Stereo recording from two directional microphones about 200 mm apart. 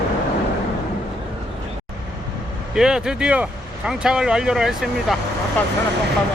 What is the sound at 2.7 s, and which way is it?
Speech, 5° right (ahead or behind).